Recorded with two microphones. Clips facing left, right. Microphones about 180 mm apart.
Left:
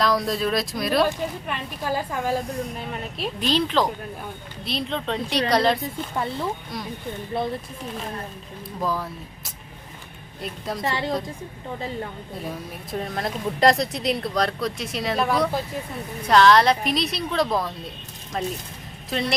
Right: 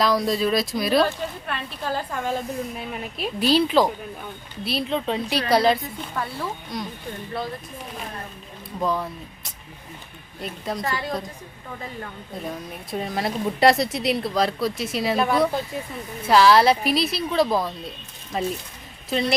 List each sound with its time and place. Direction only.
0.0 s a woman's voice: centre (ahead or behind)
1.0 s a woman's voice: 15° left (ahead or behind); by 5.8 s centre (ahead or behind)
6.1 s a woman's voice: 25° left (ahead or behind)
6.7 s a woman's voice: centre (ahead or behind)
8.8 s a woman's voice: centre (ahead or behind)
10.8 s a woman's voice: 25° left (ahead or behind)
12.5 s a woman's voice: centre (ahead or behind)